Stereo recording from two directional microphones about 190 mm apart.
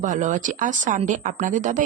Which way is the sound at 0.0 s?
40° right (ahead or behind).